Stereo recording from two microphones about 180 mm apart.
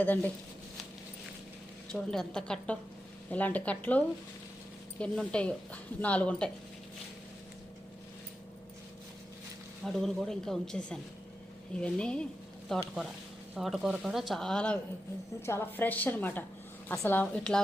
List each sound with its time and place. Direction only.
0.0 s speech: 10° left (ahead or behind)
1.9 s speech: 5° left (ahead or behind)
9.8 s speech: centre (ahead or behind)